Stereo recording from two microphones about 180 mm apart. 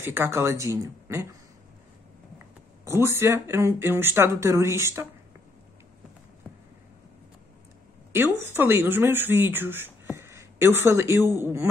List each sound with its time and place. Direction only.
0.0 s speech: 15° right (ahead or behind)
2.8 s speech: 15° right (ahead or behind)
8.1 s speech: 10° right (ahead or behind)